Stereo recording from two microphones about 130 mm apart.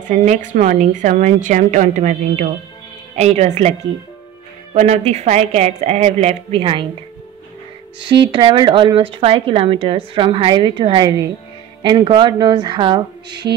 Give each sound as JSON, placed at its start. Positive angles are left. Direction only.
{"t": 0.1, "sound": "a woman's voice", "side_deg": -70}
{"t": 4.7, "sound": "a woman's voice", "side_deg": -60}
{"t": 8.1, "sound": "a woman's voice", "side_deg": -40}